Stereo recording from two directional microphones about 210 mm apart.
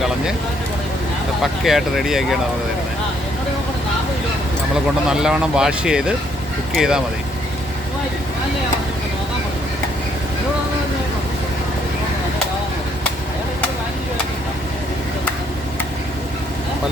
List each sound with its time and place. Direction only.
1.4 s speech: centre (ahead or behind)
5.0 s speech: 5° right (ahead or behind)